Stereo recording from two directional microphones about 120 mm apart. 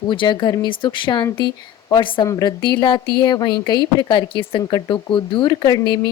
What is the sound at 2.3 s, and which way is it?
Speech, 30° left (ahead or behind).